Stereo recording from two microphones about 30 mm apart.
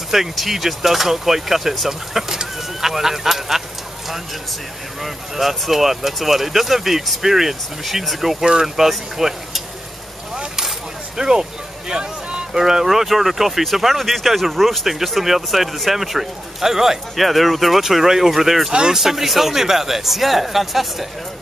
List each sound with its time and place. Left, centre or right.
0.1 s speech: centre
5.3 s speech: centre
7.8 s speech: centre
11.1 s speech: right
11.9 s a sound: right
12.5 s speech: centre
12.8 s speech: centre
14.9 s speech: centre
17.2 s speech: centre
18.7 s speech: right
18.9 s speech: centre